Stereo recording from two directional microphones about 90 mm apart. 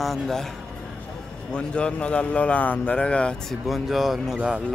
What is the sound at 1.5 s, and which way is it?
Speech, 10° left (ahead or behind).